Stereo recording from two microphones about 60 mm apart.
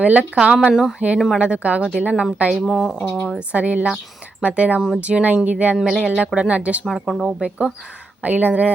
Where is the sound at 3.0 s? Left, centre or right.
Left.